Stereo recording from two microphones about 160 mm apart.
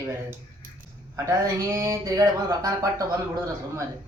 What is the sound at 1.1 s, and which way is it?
Speech, 20° right (ahead or behind).